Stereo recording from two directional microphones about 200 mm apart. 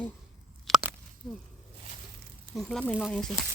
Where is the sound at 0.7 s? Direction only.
Centre (ahead or behind).